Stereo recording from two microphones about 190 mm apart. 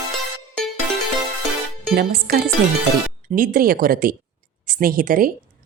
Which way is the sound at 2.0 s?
50° right (ahead or behind).